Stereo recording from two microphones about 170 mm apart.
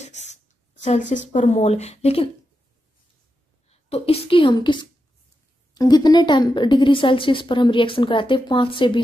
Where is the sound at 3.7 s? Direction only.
35° left (ahead or behind).